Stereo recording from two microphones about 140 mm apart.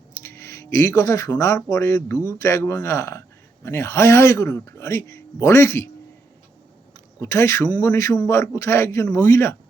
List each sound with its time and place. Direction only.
0.2 s speech: 20° left (ahead or behind)
7.2 s speech: 20° left (ahead or behind)